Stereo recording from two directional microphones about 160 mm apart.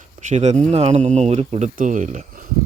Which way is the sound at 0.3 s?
45° right (ahead or behind).